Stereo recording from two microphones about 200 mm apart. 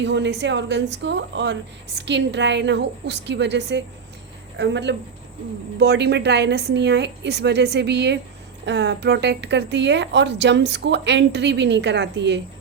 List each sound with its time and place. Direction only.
0.0 s a woman's voice: 60° right (ahead or behind)